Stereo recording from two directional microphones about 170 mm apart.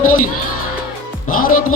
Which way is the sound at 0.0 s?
55° left (ahead or behind).